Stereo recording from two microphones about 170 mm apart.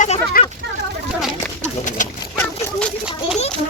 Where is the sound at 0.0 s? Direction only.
45° left (ahead or behind).